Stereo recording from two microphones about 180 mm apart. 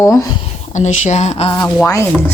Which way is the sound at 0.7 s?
40° left (ahead or behind).